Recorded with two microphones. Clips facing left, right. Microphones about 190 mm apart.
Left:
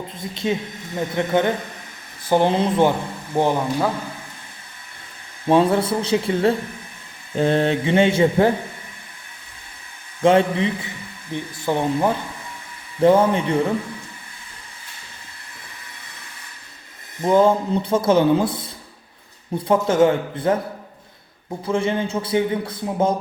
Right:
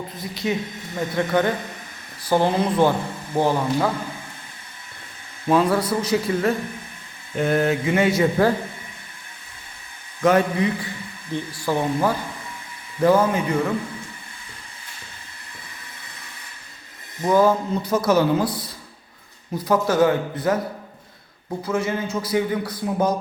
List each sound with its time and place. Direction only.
0.2 s a man's voice: 25° left (ahead or behind)
5.5 s a man's voice: 25° left (ahead or behind)
10.2 s a man's voice: 25° left (ahead or behind)
17.2 s a man's voice: 25° left (ahead or behind)
21.6 s a man's voice: 25° left (ahead or behind)